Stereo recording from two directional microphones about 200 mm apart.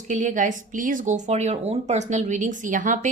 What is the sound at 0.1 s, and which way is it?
A woman's voice, 40° right (ahead or behind).